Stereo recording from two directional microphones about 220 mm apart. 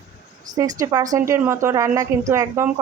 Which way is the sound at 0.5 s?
15° right (ahead or behind).